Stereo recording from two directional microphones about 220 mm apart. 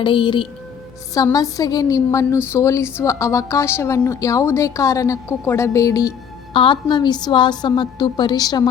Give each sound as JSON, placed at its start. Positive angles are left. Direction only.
{"t": 0.0, "sound": "a woman's voice", "side_deg": 25}